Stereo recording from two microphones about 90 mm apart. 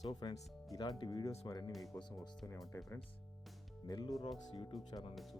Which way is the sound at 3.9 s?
45° left (ahead or behind).